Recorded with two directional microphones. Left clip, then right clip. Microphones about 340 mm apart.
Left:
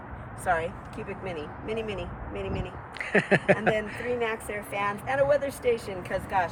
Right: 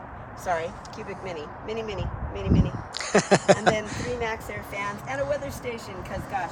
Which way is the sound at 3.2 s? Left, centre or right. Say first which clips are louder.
Right 3 dB; right.